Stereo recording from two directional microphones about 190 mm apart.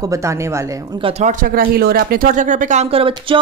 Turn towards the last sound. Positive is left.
turn(degrees=-30)  # may be behind; listen again after turning